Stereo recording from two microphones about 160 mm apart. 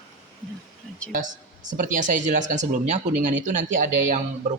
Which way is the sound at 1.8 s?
55° right (ahead or behind).